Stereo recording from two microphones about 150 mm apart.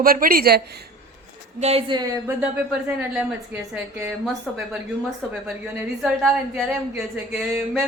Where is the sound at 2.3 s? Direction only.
10° right (ahead or behind).